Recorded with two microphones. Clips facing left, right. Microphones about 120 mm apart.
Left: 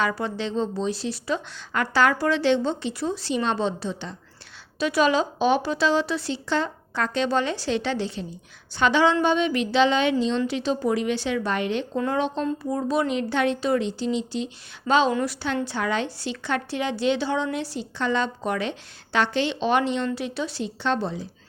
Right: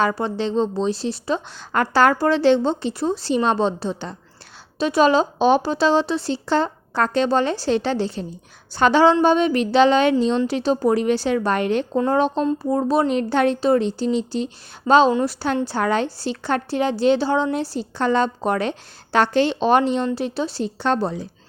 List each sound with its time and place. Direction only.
0.2 s speech: 30° right (ahead or behind)
1.7 s a woman's voice: 40° right (ahead or behind)
11.9 s a woman's voice: 35° right (ahead or behind)
15.1 s speech: 30° right (ahead or behind)
15.6 s a woman's voice: 45° right (ahead or behind)